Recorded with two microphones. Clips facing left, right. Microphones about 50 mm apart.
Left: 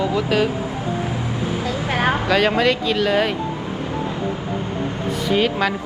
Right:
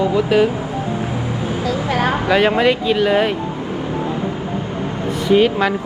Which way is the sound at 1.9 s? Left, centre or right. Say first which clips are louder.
Right 1 dB; left.